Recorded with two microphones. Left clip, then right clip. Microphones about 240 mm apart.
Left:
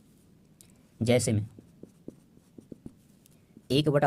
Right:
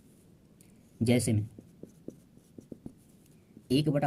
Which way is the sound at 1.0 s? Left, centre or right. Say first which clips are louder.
Left 3 dB; left.